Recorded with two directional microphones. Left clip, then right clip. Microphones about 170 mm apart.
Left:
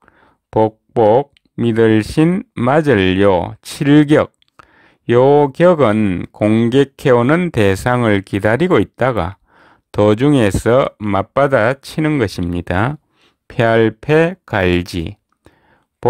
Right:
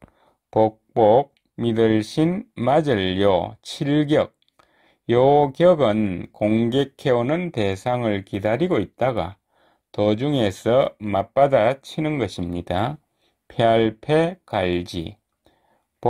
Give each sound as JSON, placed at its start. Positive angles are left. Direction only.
{"t": 0.6, "sound": "speech", "side_deg": 40}